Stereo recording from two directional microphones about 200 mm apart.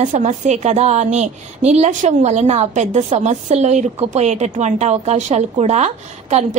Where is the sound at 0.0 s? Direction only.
35° right (ahead or behind).